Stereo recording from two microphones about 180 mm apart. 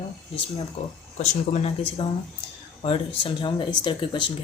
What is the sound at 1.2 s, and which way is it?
Speech, 40° left (ahead or behind).